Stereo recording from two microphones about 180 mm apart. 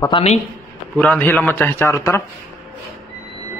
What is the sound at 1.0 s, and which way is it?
A man's voice, 10° left (ahead or behind).